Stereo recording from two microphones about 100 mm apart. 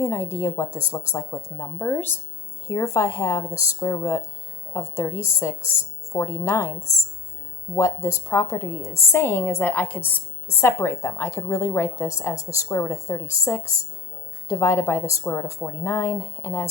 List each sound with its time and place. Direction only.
0.0 s a woman's voice: 30° left (ahead or behind)
7.8 s a woman's voice: 30° left (ahead or behind)